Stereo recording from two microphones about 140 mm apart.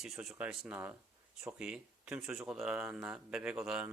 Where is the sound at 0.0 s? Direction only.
Centre (ahead or behind).